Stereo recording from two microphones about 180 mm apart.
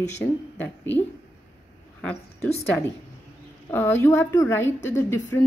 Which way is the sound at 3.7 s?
10° left (ahead or behind).